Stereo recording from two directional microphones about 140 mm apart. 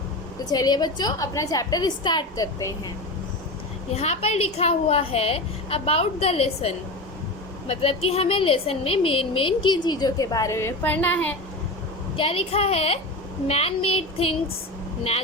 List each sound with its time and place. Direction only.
0.4 s a woman's voice: 30° left (ahead or behind)
3.9 s a woman's voice: 50° left (ahead or behind); by 11.3 s 10° left (ahead or behind)
12.1 s a woman's voice: 40° left (ahead or behind)